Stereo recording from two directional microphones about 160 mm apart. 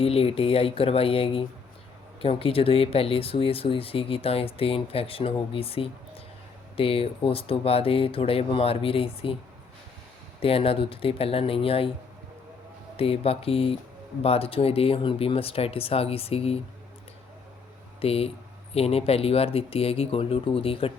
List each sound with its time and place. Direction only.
0.0 s speech: 35° left (ahead or behind)
10.4 s speech: 35° left (ahead or behind)
13.0 s speech: 35° left (ahead or behind)
18.0 s speech: 40° left (ahead or behind)